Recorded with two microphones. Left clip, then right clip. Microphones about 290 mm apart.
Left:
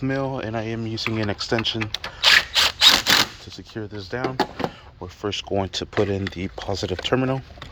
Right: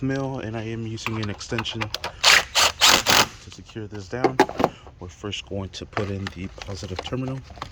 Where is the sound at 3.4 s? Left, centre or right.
Centre; by 4.6 s right.